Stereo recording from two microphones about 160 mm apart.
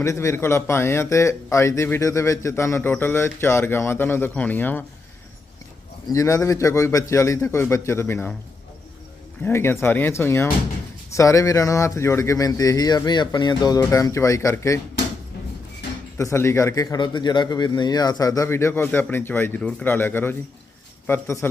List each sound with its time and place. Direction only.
0.0 s speech: 20° left (ahead or behind)
6.1 s speech: 20° left (ahead or behind)
9.4 s speech: 15° left (ahead or behind)
16.1 s speech: 15° left (ahead or behind)